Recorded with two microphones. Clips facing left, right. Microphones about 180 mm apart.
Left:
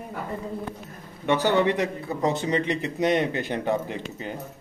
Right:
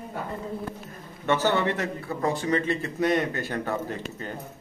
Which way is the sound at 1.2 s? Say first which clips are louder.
Left 2 dB; 15° left (ahead or behind).